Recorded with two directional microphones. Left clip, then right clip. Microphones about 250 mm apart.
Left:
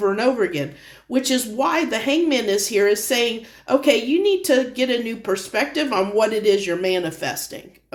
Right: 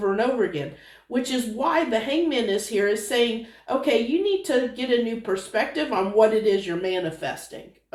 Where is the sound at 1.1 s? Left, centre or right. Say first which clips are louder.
Left 5 dB; left.